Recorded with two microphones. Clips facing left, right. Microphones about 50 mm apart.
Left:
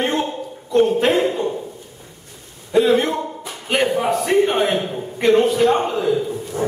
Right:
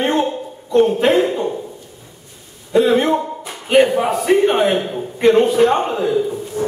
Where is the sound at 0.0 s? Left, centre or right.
Centre.